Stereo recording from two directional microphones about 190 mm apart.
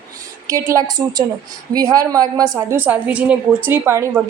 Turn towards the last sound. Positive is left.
turn(degrees=-15)  # may be behind; listen again after turning